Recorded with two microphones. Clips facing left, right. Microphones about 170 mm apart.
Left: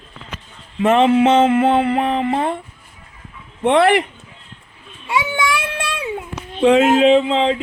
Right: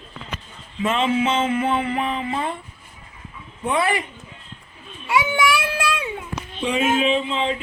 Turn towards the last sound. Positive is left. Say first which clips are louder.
# left 8 dB
turn(degrees=90)